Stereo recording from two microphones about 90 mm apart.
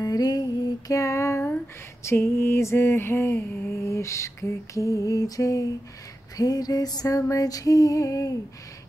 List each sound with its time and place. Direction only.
0.0 s music: 45° left (ahead or behind)
2.0 s mantra: 30° left (ahead or behind)